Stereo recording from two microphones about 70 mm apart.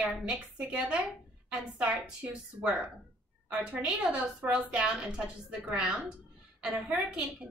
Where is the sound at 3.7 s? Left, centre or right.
Centre.